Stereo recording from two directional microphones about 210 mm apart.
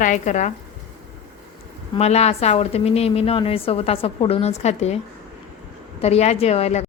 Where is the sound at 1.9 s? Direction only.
30° left (ahead or behind).